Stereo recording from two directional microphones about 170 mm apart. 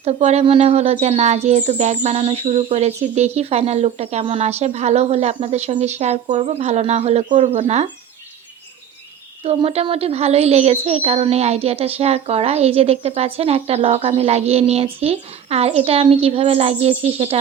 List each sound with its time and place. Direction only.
0.0 s a woman's voice: 40° right (ahead or behind)
9.4 s a woman's voice: 35° right (ahead or behind)